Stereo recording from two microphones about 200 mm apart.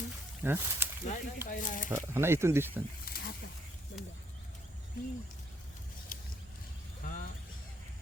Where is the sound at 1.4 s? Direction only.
40° left (ahead or behind).